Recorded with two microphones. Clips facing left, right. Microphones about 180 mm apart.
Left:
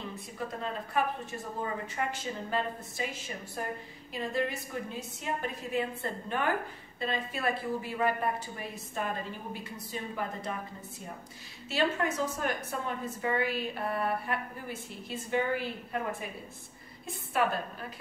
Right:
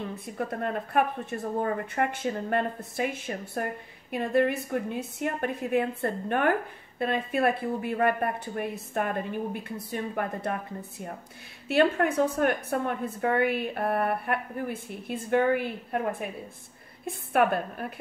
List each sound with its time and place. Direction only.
0.4 s a woman's voice: 55° right (ahead or behind)
11.7 s a woman's voice: 60° right (ahead or behind)